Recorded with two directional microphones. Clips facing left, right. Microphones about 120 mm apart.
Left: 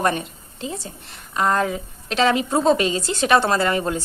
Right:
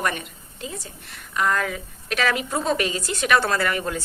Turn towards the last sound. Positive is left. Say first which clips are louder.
# left 4 dB
turn(degrees=25)  # may be behind; listen again after turning